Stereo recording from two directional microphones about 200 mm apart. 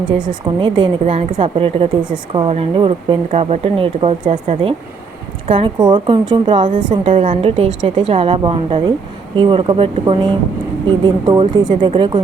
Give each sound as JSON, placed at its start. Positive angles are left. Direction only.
{"t": 0.6, "sound": "a woman's voice", "side_deg": -25}
{"t": 6.7, "sound": "a woman's voice", "side_deg": -40}